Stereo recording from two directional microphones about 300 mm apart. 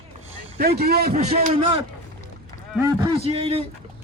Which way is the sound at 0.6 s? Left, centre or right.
Right.